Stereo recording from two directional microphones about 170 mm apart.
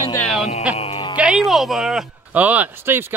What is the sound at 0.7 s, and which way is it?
Music, 35° left (ahead or behind).